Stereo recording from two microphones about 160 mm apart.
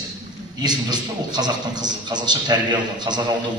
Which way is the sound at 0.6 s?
25° right (ahead or behind).